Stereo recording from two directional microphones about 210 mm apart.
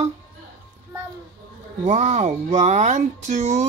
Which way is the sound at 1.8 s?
30° right (ahead or behind).